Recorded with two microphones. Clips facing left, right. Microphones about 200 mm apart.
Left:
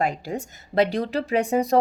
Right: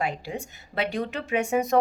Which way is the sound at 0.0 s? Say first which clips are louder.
Left 4 dB; 40° left (ahead or behind).